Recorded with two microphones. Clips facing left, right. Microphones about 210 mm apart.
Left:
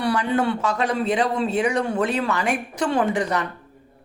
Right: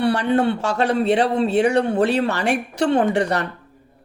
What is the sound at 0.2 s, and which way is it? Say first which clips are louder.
Speech: right 3 dB; 65° right (ahead or behind).